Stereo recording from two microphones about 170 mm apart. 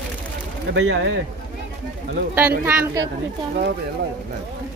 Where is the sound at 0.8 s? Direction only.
90° right.